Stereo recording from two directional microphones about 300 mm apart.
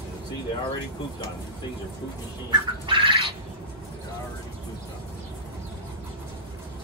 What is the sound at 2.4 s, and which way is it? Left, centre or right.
Bird, centre.